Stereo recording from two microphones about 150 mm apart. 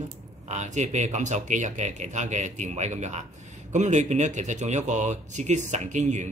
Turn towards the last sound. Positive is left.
turn(degrees=-50)  # may be behind; listen again after turning